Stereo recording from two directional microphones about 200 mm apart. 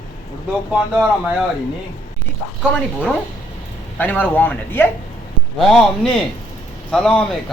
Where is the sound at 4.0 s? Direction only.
10° left (ahead or behind).